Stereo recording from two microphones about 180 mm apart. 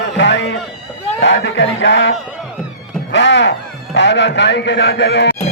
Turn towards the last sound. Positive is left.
turn(degrees=70)  # may be behind; listen again after turning